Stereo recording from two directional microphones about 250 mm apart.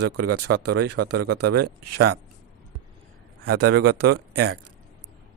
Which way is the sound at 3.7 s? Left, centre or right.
Right.